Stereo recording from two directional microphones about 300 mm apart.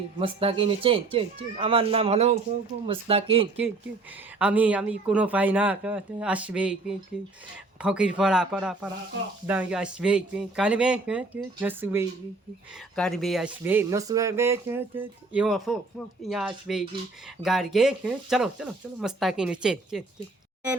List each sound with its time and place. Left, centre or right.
0.2 s speech: centre
4.4 s speech: centre